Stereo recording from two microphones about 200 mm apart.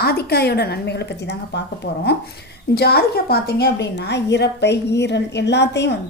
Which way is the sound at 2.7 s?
50° left (ahead or behind).